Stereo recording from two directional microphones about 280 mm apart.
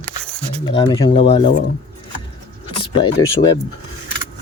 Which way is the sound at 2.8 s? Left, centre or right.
Centre.